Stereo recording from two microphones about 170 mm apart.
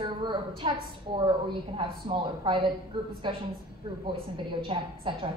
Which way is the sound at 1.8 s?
30° right (ahead or behind).